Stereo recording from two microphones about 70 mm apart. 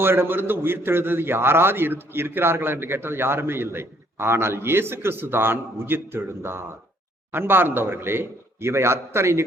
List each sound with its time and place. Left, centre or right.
0.0 s a man's voice: right